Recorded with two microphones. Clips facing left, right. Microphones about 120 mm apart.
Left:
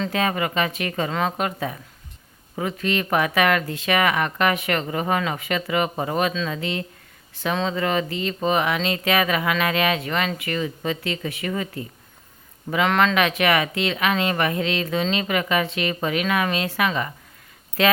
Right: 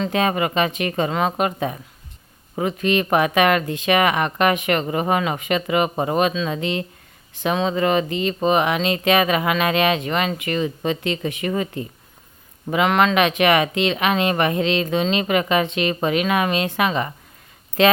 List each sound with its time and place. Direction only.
0.0 s speech: 20° right (ahead or behind)